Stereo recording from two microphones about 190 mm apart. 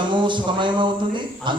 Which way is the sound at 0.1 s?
25° right (ahead or behind).